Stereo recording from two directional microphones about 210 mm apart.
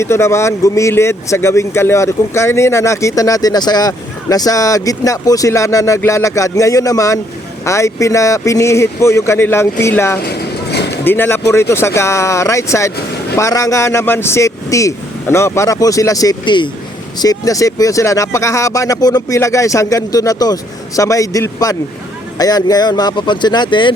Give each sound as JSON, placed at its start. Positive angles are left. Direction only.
{"t": 0.0, "sound": "speech", "side_deg": 15}
{"t": 10.2, "sound": "vehicle", "side_deg": 50}
{"t": 10.9, "sound": "speech", "side_deg": 10}